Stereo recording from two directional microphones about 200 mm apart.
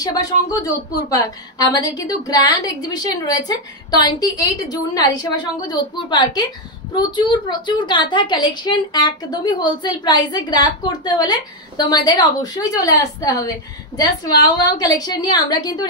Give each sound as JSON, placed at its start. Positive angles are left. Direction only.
{"t": 0.0, "sound": "a woman's voice", "side_deg": 20}